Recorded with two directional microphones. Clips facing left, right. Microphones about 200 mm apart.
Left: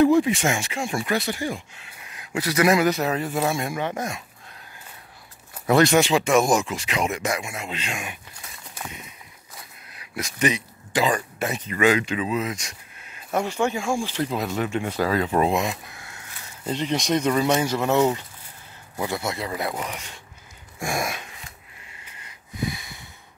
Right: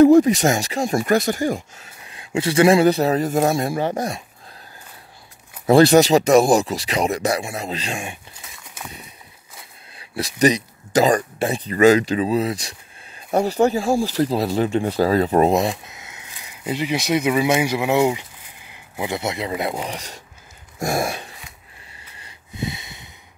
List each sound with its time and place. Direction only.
0.0 s speech: 40° right (ahead or behind)
2.0 s speech: 25° right (ahead or behind)
5.7 s speech: 35° right (ahead or behind)
9.9 s speech: 35° right (ahead or behind)
15.7 s speech: 20° right (ahead or behind)
20.8 s a sound: 35° right (ahead or behind)